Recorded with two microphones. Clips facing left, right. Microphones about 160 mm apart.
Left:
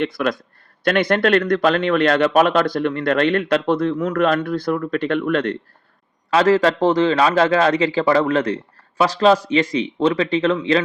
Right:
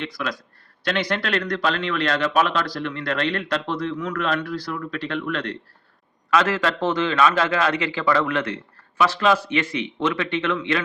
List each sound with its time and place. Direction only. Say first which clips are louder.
0.0 s a man's voice: left 8 dB; 55° left (ahead or behind)
6.3 s a man's voice: left 6 dB; 35° left (ahead or behind)